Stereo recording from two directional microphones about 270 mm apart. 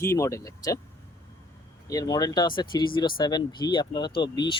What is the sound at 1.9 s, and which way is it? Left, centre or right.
Speech, centre.